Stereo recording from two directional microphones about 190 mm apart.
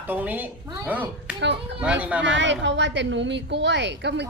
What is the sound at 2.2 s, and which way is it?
A woman's voice, 70° right (ahead or behind).